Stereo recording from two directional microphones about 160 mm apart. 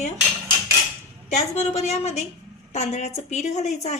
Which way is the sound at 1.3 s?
45° left (ahead or behind).